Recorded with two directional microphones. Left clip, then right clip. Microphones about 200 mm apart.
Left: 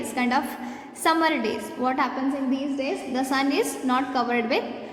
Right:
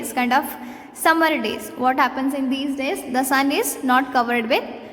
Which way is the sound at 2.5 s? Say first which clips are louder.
Right 3 dB; 35° right (ahead or behind).